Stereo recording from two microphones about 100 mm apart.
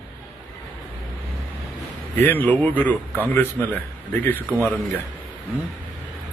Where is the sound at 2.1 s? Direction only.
20° left (ahead or behind).